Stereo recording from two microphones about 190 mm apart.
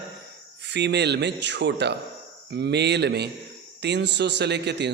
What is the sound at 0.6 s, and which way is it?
Speech, 65° right (ahead or behind).